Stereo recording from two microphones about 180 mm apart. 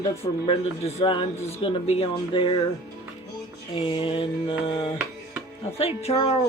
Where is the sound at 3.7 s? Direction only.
30° left (ahead or behind).